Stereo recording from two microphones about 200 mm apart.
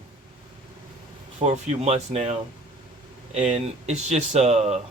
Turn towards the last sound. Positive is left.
turn(degrees=-35)  # may be behind; listen again after turning